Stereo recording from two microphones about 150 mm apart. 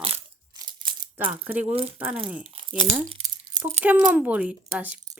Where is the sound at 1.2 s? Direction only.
10° right (ahead or behind).